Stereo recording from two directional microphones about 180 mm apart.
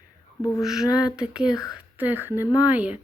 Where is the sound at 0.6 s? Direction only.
Centre (ahead or behind).